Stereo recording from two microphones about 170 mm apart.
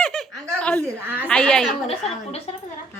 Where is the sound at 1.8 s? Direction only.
35° left (ahead or behind).